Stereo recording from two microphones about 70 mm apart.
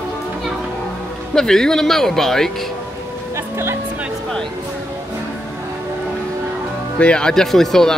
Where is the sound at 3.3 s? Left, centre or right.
Right.